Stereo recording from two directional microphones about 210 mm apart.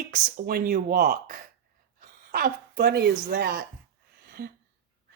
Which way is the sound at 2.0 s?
40° right (ahead or behind).